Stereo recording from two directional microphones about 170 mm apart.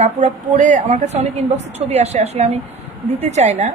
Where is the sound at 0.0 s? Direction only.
45° right (ahead or behind).